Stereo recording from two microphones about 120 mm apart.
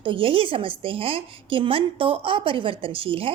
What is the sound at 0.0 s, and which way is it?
A woman's voice, 50° right (ahead or behind).